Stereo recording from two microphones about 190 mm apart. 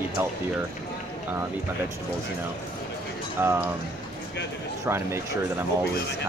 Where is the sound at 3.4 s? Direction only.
10° right (ahead or behind).